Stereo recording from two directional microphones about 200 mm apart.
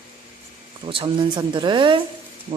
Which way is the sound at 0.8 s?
25° right (ahead or behind).